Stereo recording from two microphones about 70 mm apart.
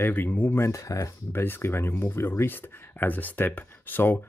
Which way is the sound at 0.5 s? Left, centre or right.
Left.